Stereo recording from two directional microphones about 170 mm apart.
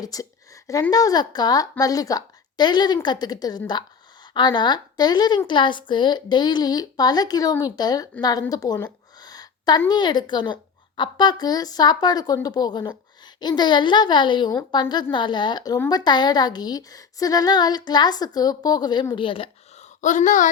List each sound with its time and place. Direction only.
0.0 s a woman's voice: 20° left (ahead or behind)
8.2 s a sound: 25° left (ahead or behind)
9.9 s a woman's voice: 25° left (ahead or behind); by 20.5 s 45° left (ahead or behind)